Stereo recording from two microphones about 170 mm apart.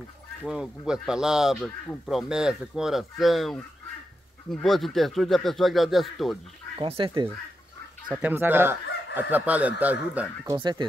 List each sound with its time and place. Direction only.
0.5 s speech: 5° right (ahead or behind)
6.8 s speech: 30° right (ahead or behind)
8.1 s speech: 10° right (ahead or behind)
10.4 s speech: 25° right (ahead or behind)